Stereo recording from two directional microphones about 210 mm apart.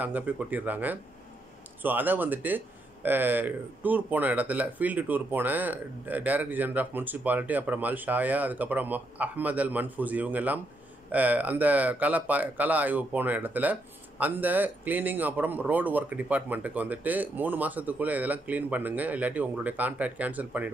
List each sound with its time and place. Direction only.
0.0 s speech: 10° right (ahead or behind)